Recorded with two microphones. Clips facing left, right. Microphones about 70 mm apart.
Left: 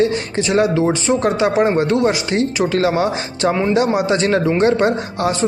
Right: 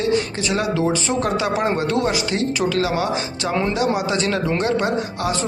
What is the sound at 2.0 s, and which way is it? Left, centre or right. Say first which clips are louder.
Speech: left 4 dB; left.